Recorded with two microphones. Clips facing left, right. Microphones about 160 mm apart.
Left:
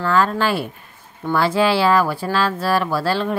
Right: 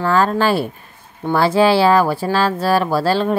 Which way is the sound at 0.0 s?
35° right (ahead or behind).